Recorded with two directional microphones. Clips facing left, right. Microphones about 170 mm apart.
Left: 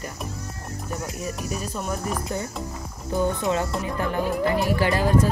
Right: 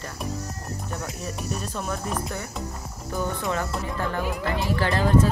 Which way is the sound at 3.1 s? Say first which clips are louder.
Left 4 dB; 20° left (ahead or behind).